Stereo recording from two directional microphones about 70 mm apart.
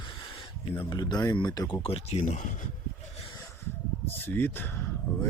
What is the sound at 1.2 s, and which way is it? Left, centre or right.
Speech, left.